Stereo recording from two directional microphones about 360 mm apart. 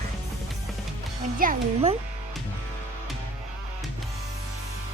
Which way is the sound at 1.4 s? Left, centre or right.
Right.